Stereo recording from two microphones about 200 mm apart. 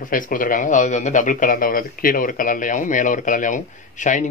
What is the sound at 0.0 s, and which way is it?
Speech, 45° left (ahead or behind).